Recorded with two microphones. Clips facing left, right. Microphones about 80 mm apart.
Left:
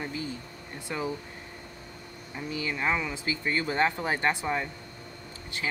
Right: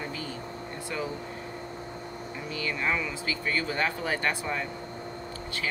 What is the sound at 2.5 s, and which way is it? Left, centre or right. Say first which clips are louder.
Speech: left 1 dB; left.